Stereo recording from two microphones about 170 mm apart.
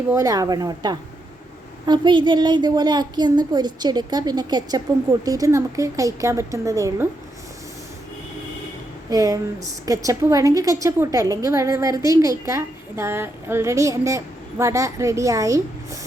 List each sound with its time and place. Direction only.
0.1 s a woman's voice: 20° right (ahead or behind)
9.0 s a woman's voice: 20° right (ahead or behind)